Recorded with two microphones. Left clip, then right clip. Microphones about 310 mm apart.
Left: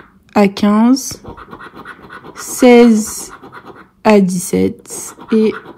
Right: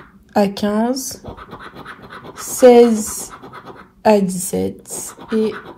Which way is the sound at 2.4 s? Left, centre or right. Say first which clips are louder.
Left 1 dB; left.